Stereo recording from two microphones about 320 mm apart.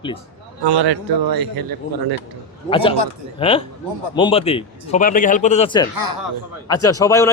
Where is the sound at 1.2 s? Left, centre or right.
Right.